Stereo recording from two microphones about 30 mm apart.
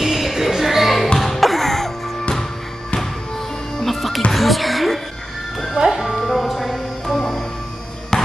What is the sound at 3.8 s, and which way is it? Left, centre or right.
Music, centre.